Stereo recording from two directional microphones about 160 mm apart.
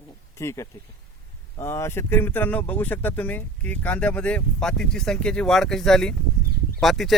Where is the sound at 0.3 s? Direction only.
20° left (ahead or behind).